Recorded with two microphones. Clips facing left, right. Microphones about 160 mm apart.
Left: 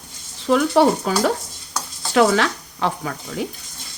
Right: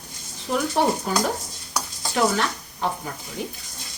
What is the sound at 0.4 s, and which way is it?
Stir, 90° left.